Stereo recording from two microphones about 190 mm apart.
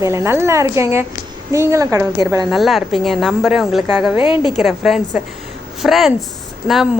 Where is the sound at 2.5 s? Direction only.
Centre (ahead or behind).